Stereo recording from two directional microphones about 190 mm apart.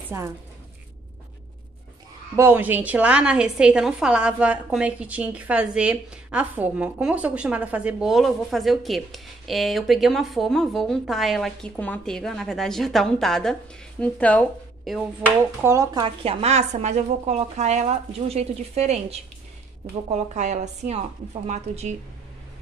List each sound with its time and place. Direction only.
0.1 s a woman's voice: 15° right (ahead or behind)
2.3 s a woman's voice: 10° right (ahead or behind)
15.6 s a woman's voice: 15° right (ahead or behind); by 21.9 s 35° right (ahead or behind)